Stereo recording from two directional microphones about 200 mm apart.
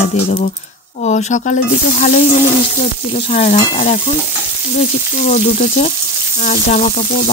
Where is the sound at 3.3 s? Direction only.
35° left (ahead or behind).